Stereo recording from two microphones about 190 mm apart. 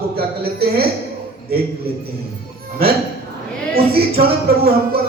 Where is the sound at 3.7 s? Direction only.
55° right (ahead or behind).